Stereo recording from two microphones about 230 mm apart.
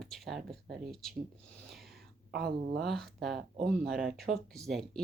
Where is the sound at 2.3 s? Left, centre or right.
Right.